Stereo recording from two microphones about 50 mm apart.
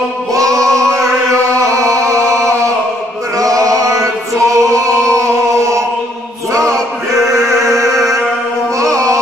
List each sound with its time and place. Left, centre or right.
0.3 s music: right
0.9 s chant: right
3.8 s music: right
7.3 s music: right
8.7 s carnatic music: right